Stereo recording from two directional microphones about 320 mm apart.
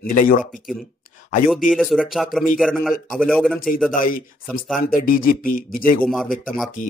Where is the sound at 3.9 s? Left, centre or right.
Left.